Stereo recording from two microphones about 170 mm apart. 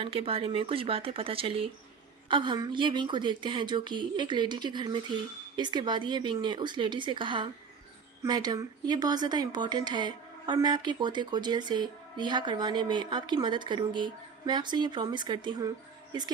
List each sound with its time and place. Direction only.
0.0 s speech: 35° right (ahead or behind)